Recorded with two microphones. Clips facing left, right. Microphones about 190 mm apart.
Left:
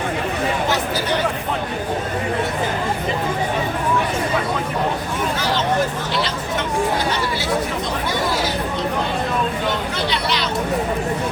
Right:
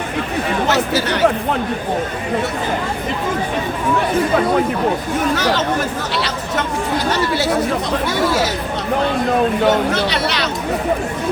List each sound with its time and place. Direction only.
0.7 s speech: 70° right (ahead or behind)
9.6 s speech: 75° right (ahead or behind)